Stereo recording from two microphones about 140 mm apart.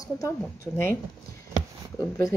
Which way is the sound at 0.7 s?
15° left (ahead or behind).